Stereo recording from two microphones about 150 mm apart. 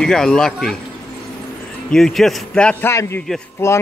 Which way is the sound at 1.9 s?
Centre (ahead or behind).